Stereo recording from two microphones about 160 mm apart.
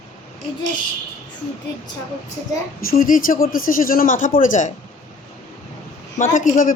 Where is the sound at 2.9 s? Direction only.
60° left (ahead or behind).